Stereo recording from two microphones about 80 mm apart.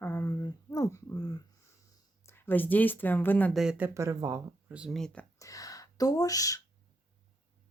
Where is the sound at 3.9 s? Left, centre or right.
Right.